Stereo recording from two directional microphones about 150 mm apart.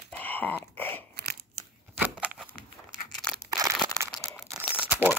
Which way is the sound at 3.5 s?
20° right (ahead or behind).